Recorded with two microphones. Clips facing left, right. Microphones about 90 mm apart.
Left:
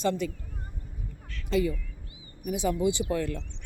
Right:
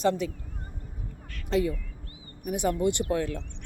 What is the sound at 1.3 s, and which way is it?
Duck, 60° right (ahead or behind).